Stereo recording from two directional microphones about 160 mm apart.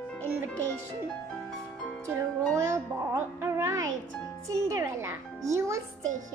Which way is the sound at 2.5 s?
20° right (ahead or behind).